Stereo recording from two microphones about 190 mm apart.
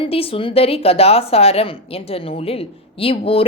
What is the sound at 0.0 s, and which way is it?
A woman's voice, 30° left (ahead or behind).